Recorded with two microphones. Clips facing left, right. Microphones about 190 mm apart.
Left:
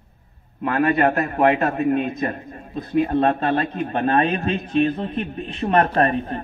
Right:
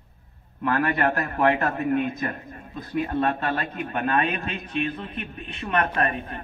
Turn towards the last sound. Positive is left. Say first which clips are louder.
# left 7 dB
turn(degrees=35)  # may be behind; listen again after turning